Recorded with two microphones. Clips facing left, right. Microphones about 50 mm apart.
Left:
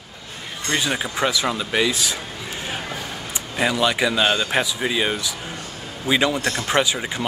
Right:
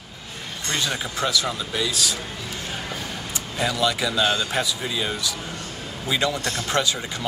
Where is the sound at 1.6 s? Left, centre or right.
Left.